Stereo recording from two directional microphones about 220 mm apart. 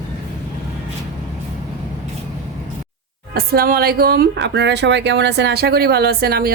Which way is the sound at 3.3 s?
45° right (ahead or behind).